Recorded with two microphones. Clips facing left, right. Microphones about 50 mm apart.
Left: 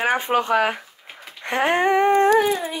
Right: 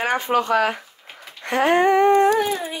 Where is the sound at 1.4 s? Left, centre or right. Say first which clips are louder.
Right 2 dB; centre.